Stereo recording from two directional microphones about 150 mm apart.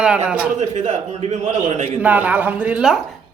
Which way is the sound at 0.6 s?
50° right (ahead or behind).